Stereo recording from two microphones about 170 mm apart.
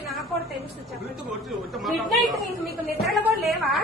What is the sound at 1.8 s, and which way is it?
Speech, centre (ahead or behind).